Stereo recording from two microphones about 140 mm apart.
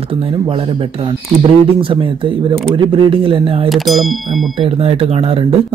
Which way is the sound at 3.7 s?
Centre (ahead or behind).